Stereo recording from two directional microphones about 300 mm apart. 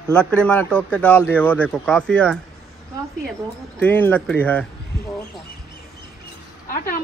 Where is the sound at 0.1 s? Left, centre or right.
Centre.